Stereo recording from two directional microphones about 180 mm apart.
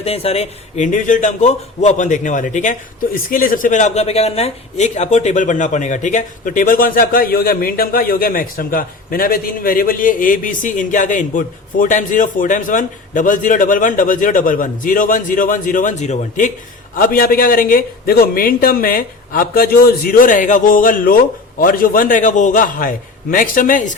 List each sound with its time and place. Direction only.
0.0 s speech: 35° left (ahead or behind)